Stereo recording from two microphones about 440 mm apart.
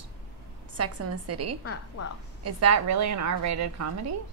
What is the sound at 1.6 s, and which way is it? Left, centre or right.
Speech, left.